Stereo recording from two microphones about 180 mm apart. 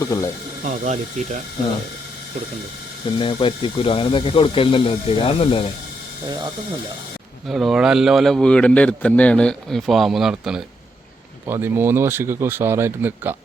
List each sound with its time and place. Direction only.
0.0 s speech: 20° left (ahead or behind)
0.6 s speech: 40° right (ahead or behind)
3.2 s speech: 30° left (ahead or behind)
6.2 s speech: 25° right (ahead or behind)
7.4 s a man's voice: centre (ahead or behind)